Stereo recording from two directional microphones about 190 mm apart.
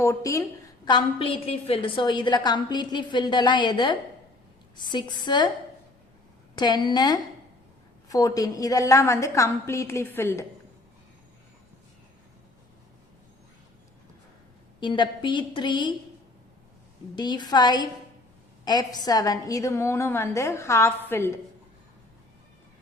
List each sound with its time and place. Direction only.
0.0 s a woman's voice: 15° left (ahead or behind)
6.6 s a woman's voice: 20° left (ahead or behind)
14.8 s a woman's voice: 25° left (ahead or behind)
17.2 s a woman's voice: 25° left (ahead or behind)